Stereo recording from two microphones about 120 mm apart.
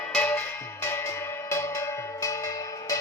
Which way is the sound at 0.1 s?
15° left (ahead or behind).